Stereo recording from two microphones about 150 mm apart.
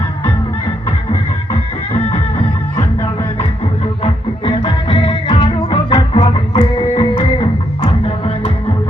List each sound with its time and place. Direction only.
1.9 s music: 40° left (ahead or behind)
4.0 s music: 35° left (ahead or behind)